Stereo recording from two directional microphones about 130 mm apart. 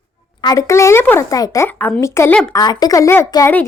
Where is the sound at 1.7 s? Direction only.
15° left (ahead or behind).